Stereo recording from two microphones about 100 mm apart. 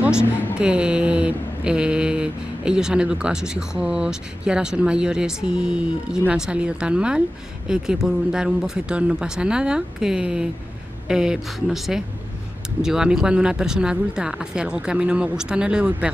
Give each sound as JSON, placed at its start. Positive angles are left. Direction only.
{"t": 0.2, "sound": "a woman's voice", "side_deg": 20}
{"t": 0.6, "sound": "mantra", "side_deg": -10}
{"t": 11.1, "sound": "speech", "side_deg": -5}
{"t": 12.8, "sound": "mantra", "side_deg": -5}